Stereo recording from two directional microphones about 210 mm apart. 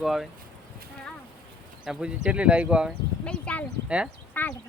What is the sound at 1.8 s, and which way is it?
Speech, 5° right (ahead or behind).